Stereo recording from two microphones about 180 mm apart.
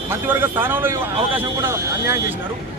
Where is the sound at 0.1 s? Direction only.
10° right (ahead or behind).